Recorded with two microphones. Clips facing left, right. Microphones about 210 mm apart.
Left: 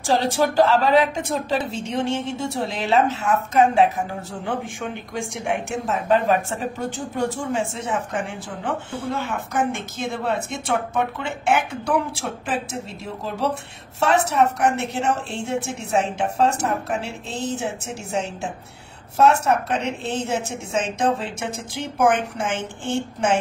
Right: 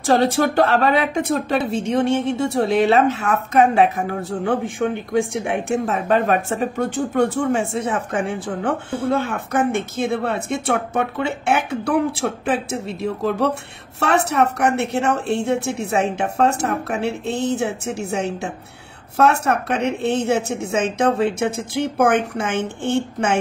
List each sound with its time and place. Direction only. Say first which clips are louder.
0.0 s speech: right 4 dB; 60° right (ahead or behind)